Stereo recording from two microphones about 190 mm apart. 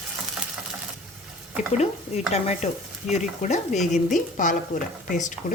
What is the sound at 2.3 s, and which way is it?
Speech, 35° left (ahead or behind).